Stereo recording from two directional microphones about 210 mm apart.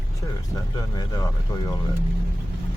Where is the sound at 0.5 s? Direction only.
15° left (ahead or behind).